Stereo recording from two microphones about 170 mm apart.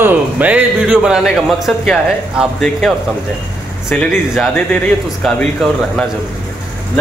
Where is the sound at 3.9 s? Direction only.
5° left (ahead or behind).